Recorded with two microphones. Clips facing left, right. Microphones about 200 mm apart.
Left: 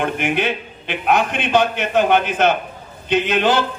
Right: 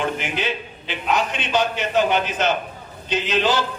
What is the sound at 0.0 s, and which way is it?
A man's voice, 55° left (ahead or behind).